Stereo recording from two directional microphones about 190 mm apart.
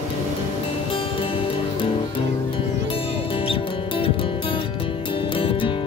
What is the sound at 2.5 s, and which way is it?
Music, 30° left (ahead or behind).